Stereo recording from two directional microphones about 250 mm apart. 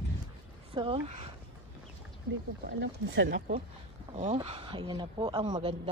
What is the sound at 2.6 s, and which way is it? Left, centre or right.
Speech, right.